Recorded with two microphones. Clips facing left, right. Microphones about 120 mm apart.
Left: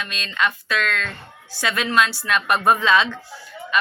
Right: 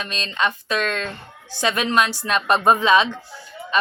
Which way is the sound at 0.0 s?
30° right (ahead or behind).